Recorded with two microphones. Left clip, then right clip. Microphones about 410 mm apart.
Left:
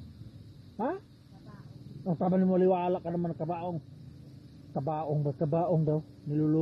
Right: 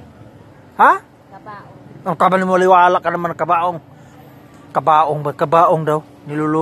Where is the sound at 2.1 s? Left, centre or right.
Centre.